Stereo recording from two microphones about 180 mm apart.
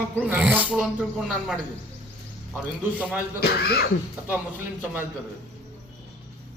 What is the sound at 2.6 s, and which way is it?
Speech, 5° right (ahead or behind).